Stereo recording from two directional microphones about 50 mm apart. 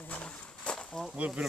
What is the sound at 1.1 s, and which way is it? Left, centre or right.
Speech, right.